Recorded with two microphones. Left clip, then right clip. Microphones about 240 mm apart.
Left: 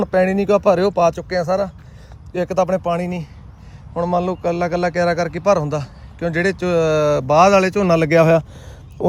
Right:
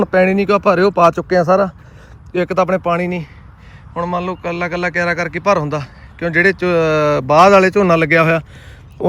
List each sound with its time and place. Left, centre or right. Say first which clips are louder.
0.0 s a man's voice: right 3 dB; centre
3.0 s speech: right 5 dB; left
3.9 s a man's voice: left 1 dB; centre